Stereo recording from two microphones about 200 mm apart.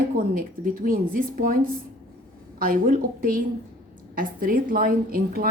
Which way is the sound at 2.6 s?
45° right (ahead or behind).